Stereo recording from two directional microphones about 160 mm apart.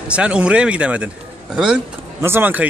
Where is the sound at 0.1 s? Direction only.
5° right (ahead or behind).